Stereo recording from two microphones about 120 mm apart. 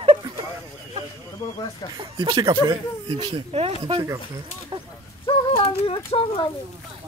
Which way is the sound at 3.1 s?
45° right (ahead or behind).